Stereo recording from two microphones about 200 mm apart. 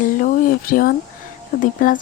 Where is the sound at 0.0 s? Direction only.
40° left (ahead or behind).